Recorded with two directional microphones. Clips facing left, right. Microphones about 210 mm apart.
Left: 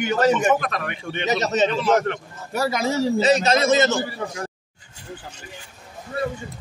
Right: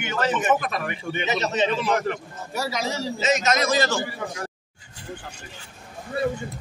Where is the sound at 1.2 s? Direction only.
40° left (ahead or behind).